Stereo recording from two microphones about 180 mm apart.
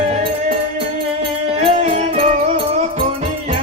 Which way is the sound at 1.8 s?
35° right (ahead or behind).